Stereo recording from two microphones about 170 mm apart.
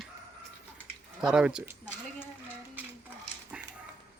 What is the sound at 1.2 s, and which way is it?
Speech, 5° right (ahead or behind).